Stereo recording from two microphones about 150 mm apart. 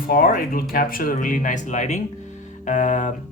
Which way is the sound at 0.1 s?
75° left (ahead or behind).